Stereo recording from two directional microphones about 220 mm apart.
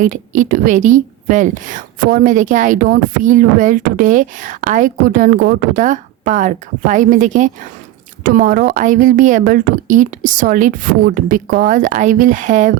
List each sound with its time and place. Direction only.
0.0 s a woman's voice: 35° right (ahead or behind)